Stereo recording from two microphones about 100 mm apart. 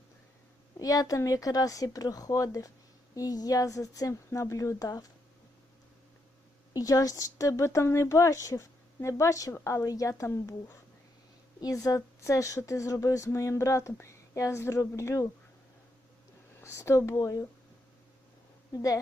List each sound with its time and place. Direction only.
0.8 s a woman's voice: 35° left (ahead or behind)
6.7 s a woman's voice: 35° left (ahead or behind)
16.6 s speech: 25° left (ahead or behind)
18.7 s a woman's voice: 35° left (ahead or behind)